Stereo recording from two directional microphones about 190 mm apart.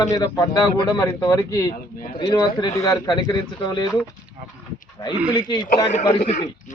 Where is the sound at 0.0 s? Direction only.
20° left (ahead or behind).